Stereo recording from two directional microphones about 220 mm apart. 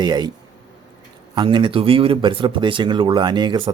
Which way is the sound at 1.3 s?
20° right (ahead or behind).